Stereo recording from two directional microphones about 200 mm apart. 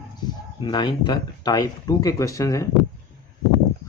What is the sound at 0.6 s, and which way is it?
Speech, 20° left (ahead or behind).